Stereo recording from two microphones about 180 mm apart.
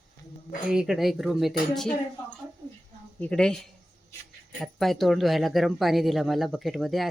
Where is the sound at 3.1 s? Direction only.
5° left (ahead or behind).